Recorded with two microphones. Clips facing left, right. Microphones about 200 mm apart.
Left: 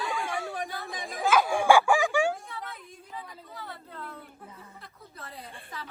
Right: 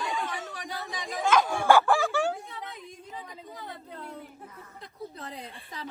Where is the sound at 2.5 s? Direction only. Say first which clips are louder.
Even; 15° right (ahead or behind).